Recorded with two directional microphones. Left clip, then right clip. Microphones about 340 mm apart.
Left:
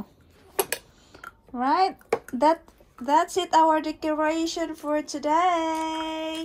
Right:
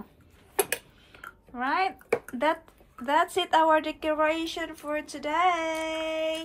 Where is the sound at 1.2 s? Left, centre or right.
Centre.